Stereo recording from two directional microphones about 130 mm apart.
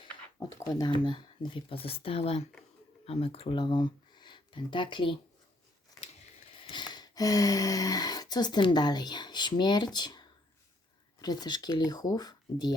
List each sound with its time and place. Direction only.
0.5 s speech: 30° left (ahead or behind)
6.7 s speech: 35° left (ahead or behind)